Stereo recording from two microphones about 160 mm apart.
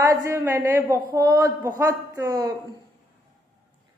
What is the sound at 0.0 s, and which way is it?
A woman's voice, 20° right (ahead or behind).